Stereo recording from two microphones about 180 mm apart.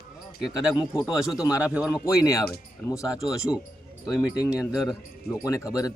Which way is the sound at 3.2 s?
5° right (ahead or behind).